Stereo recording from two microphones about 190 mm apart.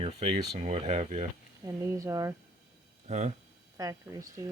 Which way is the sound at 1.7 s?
15° right (ahead or behind).